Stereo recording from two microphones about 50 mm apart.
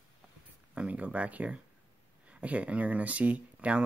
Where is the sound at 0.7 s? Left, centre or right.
Right.